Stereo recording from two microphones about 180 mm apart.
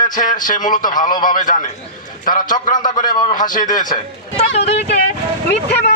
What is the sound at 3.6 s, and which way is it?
Speech, 25° left (ahead or behind).